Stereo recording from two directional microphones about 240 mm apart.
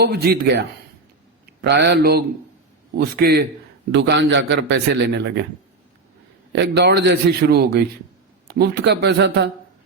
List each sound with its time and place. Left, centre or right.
0.0 s a man's voice: right
6.5 s a man's voice: right